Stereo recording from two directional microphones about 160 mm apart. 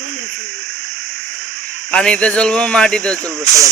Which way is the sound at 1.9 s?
5° left (ahead or behind).